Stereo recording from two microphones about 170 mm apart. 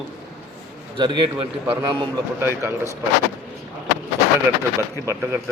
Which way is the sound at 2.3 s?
15° right (ahead or behind).